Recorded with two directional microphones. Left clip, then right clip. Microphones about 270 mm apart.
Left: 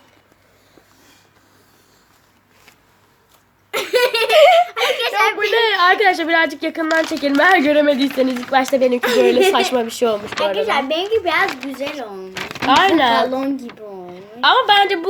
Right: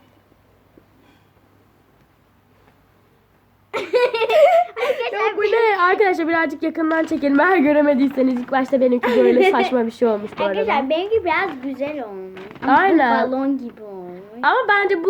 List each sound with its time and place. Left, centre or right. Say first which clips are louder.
3.7 s laughter: left 2 dB; left
4.4 s a sound: left 3 dB; centre
4.6 s a sound: left 3 dB; left
5.5 s a woman's voice: left 2 dB; centre
9.0 s a child's voice: even; left
9.5 s a woman's voice: left 1 dB; centre
10.6 s a child's voice: left 1 dB; left
12.6 s a woman's voice: left 1 dB; centre
13.1 s a sound: left 2 dB; left
14.4 s a woman's voice: left 4 dB; centre